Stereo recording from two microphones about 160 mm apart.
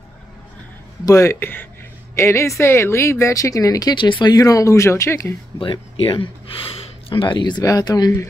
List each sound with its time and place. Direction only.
1.0 s speech: 20° left (ahead or behind)
5.6 s speech: 35° left (ahead or behind)